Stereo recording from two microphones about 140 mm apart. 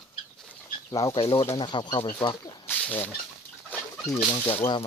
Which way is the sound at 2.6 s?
15° left (ahead or behind).